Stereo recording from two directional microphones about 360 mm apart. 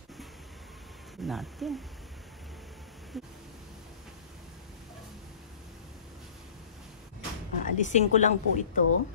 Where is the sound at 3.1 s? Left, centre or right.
Centre.